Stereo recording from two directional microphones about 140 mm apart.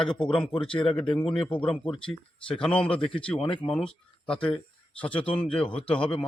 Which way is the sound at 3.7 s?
5° left (ahead or behind).